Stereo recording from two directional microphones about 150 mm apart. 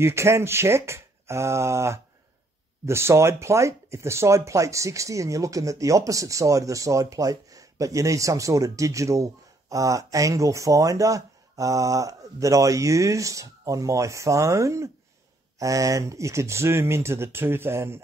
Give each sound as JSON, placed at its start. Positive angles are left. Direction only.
{"t": 0.0, "sound": "speech", "side_deg": -20}